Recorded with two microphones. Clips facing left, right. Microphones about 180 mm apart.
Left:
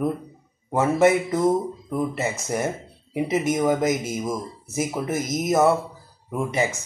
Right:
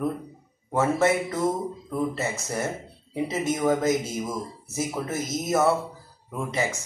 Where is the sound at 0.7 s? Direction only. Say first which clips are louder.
Left 4 dB; 15° left (ahead or behind).